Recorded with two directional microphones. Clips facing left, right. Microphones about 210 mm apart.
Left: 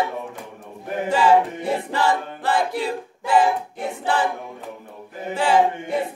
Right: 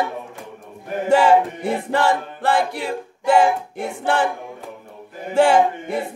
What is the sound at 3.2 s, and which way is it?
Music, 70° right (ahead or behind).